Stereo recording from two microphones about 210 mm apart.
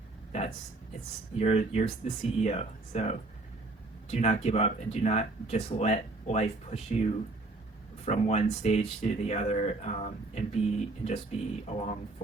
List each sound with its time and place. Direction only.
1.4 s speech: 30° left (ahead or behind)